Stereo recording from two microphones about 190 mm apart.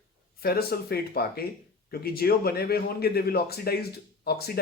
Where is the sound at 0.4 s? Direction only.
55° left (ahead or behind).